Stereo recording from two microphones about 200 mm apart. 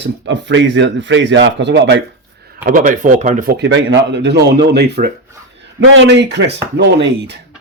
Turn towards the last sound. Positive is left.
turn(degrees=-60)  # may be behind; listen again after turning